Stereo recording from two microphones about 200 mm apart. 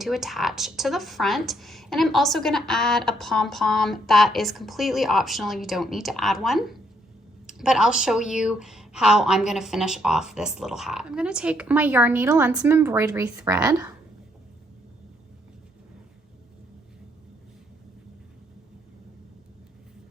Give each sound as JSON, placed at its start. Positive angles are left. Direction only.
{"t": 0.0, "sound": "speech", "side_deg": 0}